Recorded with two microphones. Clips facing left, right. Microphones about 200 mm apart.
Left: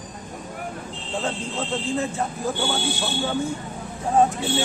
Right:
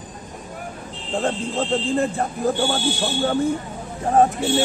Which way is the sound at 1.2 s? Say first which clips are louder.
Right 6 dB; 55° right (ahead or behind).